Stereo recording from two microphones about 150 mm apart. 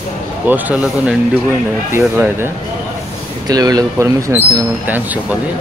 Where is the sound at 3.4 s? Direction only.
25° right (ahead or behind).